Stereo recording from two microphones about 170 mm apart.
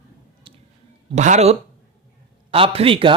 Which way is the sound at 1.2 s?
45° right (ahead or behind).